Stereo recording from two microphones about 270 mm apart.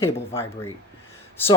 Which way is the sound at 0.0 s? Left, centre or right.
Centre.